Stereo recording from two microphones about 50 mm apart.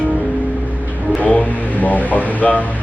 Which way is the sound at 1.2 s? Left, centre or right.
Left.